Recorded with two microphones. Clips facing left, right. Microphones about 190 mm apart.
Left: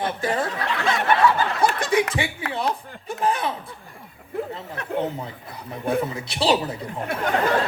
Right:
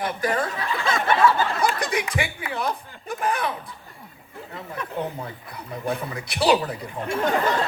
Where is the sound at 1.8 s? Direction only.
30° left (ahead or behind).